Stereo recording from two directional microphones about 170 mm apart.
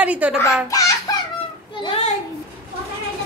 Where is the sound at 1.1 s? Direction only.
25° left (ahead or behind).